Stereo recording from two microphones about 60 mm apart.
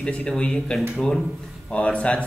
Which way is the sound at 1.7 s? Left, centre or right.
Centre.